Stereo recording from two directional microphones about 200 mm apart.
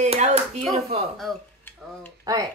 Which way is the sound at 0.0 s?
35° right (ahead or behind).